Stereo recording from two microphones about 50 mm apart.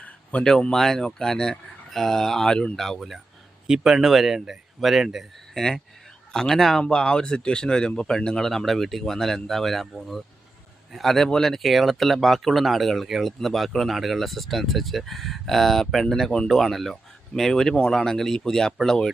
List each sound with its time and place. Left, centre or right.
0.0 s a sound: left
0.7 s speech: centre
3.7 s speech: centre
6.8 s speech: centre